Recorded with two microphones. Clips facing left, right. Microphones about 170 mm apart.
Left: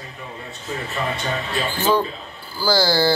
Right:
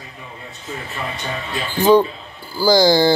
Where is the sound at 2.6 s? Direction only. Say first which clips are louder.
Right 5 dB; 15° right (ahead or behind).